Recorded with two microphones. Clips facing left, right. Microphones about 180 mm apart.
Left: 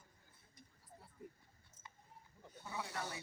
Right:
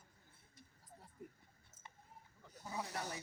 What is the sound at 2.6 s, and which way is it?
Snake, 35° right (ahead or behind).